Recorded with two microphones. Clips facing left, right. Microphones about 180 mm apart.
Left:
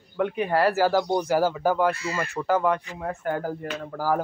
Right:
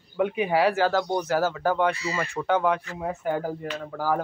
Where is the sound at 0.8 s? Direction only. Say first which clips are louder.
Left 2 dB; 10° left (ahead or behind).